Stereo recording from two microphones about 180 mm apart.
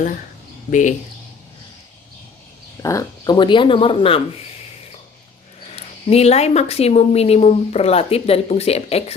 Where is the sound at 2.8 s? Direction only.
20° left (ahead or behind).